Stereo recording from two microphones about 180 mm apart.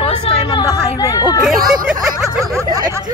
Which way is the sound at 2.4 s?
15° right (ahead or behind).